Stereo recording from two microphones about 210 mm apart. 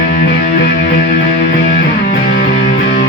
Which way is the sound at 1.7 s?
50° left (ahead or behind).